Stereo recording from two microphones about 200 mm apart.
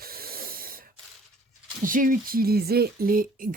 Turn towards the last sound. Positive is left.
turn(degrees=-45)  # may be behind; listen again after turning